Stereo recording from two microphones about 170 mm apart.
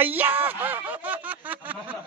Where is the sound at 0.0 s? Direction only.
10° right (ahead or behind).